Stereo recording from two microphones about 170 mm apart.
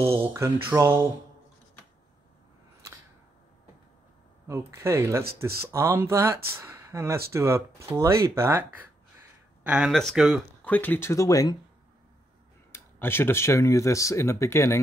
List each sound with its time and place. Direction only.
0.3 s speech: 15° right (ahead or behind)
4.5 s speech: 15° right (ahead or behind)
9.6 s speech: 5° right (ahead or behind)
10.6 s speech: 10° left (ahead or behind)
12.7 s speech: 15° left (ahead or behind)